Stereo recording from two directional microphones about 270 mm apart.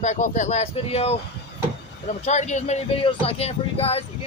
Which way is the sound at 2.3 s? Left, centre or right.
Left.